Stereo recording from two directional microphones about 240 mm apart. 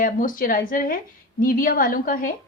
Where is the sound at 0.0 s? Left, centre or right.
Left.